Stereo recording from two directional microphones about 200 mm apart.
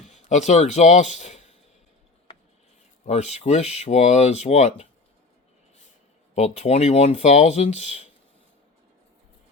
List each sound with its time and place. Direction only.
0.0 s a man's voice: 35° left (ahead or behind)
3.1 s speech: 35° left (ahead or behind)
6.3 s speech: 35° left (ahead or behind)